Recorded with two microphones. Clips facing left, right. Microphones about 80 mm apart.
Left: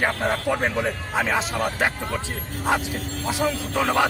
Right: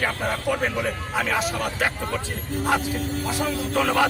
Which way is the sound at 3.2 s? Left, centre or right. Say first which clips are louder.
Left 5 dB; centre.